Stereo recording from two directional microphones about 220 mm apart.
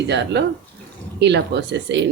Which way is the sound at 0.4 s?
50° right (ahead or behind).